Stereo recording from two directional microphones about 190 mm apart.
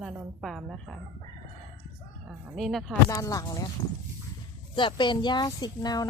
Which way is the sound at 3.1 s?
20° left (ahead or behind).